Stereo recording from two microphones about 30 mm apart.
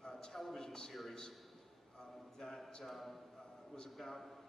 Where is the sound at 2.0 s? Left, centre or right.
Centre.